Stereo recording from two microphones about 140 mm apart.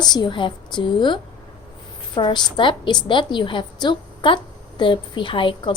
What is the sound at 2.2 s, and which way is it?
A woman's voice, 35° left (ahead or behind).